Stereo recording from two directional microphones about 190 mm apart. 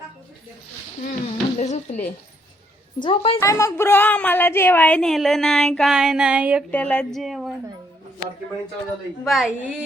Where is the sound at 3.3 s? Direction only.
15° left (ahead or behind); by 6.7 s 5° right (ahead or behind).